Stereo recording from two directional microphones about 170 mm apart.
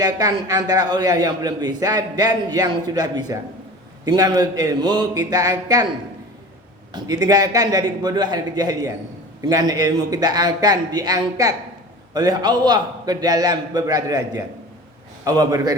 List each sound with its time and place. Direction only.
0.0 s a man's voice: 20° right (ahead or behind)
6.9 s a man's voice: 25° right (ahead or behind)